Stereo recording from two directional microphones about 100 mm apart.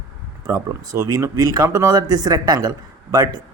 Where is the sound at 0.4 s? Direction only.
35° right (ahead or behind).